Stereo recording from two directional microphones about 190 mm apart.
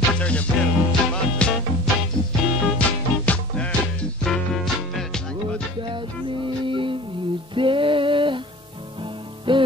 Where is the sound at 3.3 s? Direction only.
5° left (ahead or behind).